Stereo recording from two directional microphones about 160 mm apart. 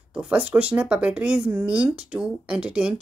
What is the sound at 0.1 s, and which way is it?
A woman's voice, 5° right (ahead or behind).